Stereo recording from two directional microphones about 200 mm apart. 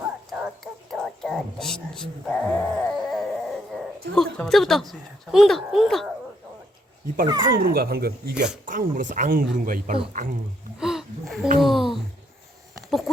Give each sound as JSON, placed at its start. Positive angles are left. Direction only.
{"t": 0.3, "sound": "a sound", "side_deg": -5}
{"t": 4.1, "sound": "speech", "side_deg": 5}
{"t": 7.3, "sound": "speech", "side_deg": -25}
{"t": 7.6, "sound": "speech", "side_deg": -50}
{"t": 10.8, "sound": "speech", "side_deg": 0}
{"t": 11.6, "sound": "a sound", "side_deg": 0}